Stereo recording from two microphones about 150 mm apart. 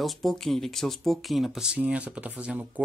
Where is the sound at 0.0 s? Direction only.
Centre (ahead or behind).